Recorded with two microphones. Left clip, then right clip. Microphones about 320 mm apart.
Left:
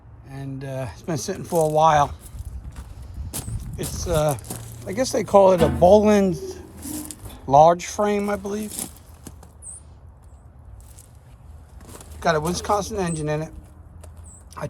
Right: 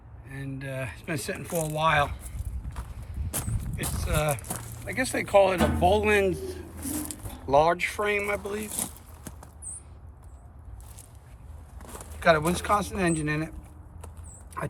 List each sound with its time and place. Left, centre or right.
0.4 s speech: centre
2.8 s walk: centre
3.2 s a sound: centre
4.9 s a man's voice: centre
6.7 s a sound: centre
7.4 s speech: centre
11.8 s speech: centre